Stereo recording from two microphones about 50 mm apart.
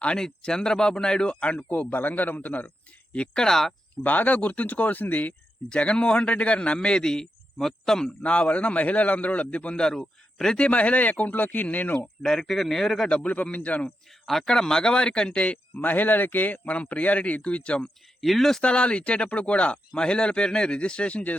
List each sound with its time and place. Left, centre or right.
0.2 s a man's voice: centre
3.4 s speech: centre
4.0 s speech: left
5.6 s a man's voice: left
8.0 s a man's voice: left
10.6 s speech: left
12.2 s speech: centre
13.1 s a man's voice: left
14.3 s a man's voice: centre; by 17.9 s left
18.2 s speech: centre
18.6 s a man's voice: left